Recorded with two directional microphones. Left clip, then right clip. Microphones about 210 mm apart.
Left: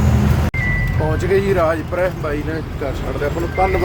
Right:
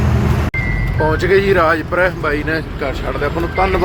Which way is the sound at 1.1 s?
10° left (ahead or behind).